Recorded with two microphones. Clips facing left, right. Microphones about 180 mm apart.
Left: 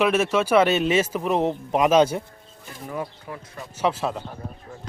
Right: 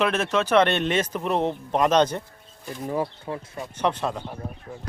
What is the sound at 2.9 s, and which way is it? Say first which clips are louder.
Speech: right 4 dB; 30° right (ahead or behind).